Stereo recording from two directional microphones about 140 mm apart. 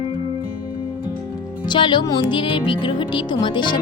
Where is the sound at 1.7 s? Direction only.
35° left (ahead or behind).